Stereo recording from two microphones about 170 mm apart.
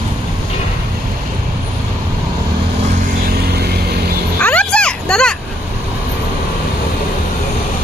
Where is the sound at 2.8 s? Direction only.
45° right (ahead or behind); by 4.0 s 70° right (ahead or behind).